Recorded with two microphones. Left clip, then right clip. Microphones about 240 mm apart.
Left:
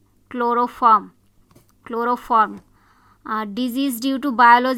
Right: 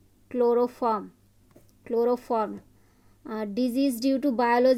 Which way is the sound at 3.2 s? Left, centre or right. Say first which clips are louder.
Left 5 dB; centre.